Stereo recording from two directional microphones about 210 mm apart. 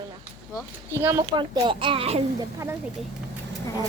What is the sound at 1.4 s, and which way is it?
Speech, 25° right (ahead or behind).